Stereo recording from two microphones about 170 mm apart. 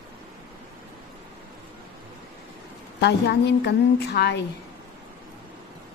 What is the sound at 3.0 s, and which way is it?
A woman's voice, 85° left.